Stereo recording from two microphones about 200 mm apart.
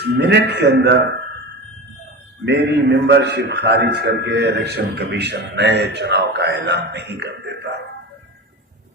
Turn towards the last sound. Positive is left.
turn(degrees=-55)  # may be behind; listen again after turning